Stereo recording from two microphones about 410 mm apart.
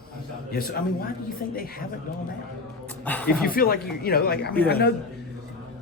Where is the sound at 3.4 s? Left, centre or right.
Left.